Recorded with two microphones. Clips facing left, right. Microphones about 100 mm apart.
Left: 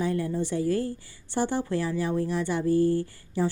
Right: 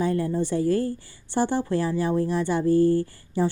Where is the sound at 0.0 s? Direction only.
35° right (ahead or behind).